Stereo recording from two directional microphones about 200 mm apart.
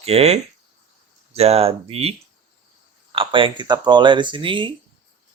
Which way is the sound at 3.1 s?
25° right (ahead or behind).